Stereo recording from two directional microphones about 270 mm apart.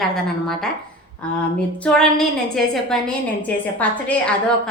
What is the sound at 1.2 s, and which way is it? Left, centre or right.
A woman's voice, centre.